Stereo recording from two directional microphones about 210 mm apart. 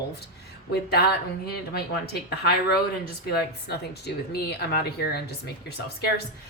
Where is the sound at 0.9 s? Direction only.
50° left (ahead or behind).